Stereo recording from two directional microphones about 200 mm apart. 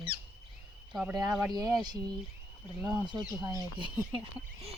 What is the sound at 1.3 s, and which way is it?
Speech, centre (ahead or behind).